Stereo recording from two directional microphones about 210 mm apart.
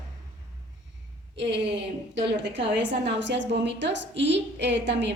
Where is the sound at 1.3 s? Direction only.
55° right (ahead or behind).